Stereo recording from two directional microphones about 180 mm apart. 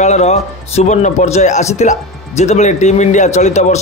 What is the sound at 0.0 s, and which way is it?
A man's voice, 40° left (ahead or behind).